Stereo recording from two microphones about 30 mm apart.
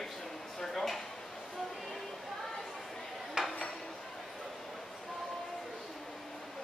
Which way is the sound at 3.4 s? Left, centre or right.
Centre.